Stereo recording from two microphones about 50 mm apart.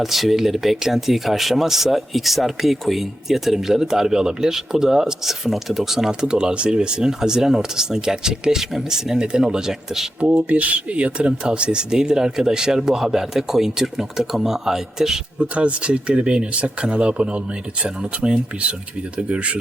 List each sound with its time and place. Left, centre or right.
0.0 s speech: centre
10.3 s speech: right; by 15.2 s centre
15.4 s speech: right